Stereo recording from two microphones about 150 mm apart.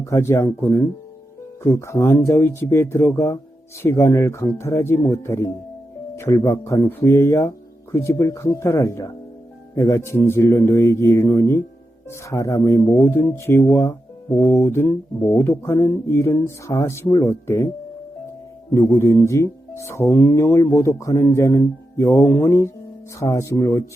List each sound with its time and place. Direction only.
0.0 s speech: 20° left (ahead or behind)
18.7 s speech: 20° left (ahead or behind)